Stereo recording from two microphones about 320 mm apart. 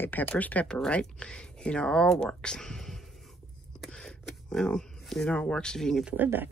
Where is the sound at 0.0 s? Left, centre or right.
Centre.